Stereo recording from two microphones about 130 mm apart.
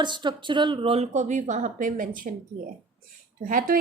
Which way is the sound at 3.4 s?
90° right.